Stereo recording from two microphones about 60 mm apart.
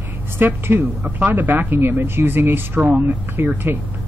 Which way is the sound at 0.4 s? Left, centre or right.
Right.